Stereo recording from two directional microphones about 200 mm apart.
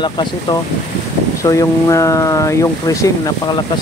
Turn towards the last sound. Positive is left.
turn(degrees=15)  # may be behind; listen again after turning